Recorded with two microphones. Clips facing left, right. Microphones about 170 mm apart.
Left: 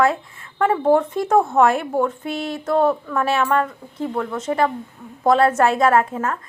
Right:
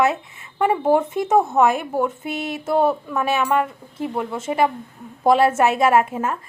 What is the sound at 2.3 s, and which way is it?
Speech, 20° right (ahead or behind).